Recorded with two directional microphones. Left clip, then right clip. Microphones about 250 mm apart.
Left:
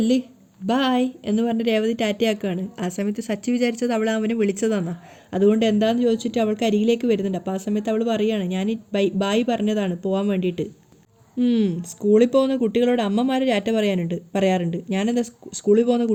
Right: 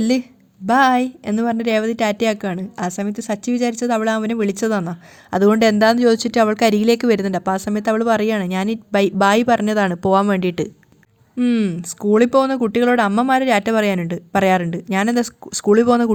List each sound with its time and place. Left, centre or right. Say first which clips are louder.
0.7 s speech: right 7 dB; right
11.3 s speech: right 2 dB; centre